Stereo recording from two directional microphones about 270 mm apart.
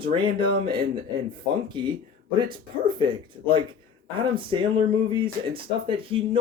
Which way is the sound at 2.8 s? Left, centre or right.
Centre.